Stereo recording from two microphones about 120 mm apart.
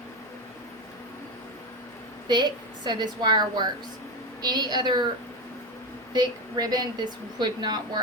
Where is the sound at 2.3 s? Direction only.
35° right (ahead or behind).